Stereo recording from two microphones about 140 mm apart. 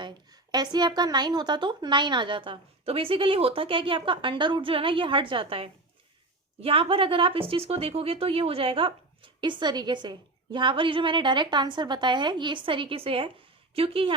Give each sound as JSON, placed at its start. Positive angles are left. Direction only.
{"t": 0.0, "sound": "a woman's voice", "side_deg": -30}